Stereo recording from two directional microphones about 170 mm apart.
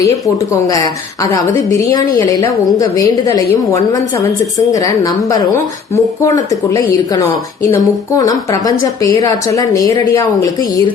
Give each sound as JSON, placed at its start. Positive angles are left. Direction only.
{"t": 1.2, "sound": "a woman's voice", "side_deg": 20}